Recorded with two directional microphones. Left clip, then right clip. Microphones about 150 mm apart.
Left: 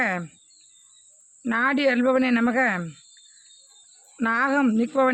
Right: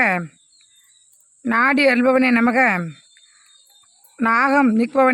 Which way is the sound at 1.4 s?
35° right (ahead or behind).